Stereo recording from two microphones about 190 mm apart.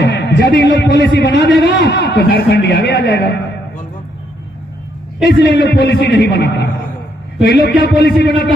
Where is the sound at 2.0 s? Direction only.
55° left (ahead or behind).